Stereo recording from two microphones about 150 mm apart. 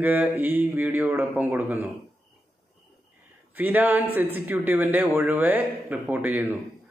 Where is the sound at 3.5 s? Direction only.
10° right (ahead or behind).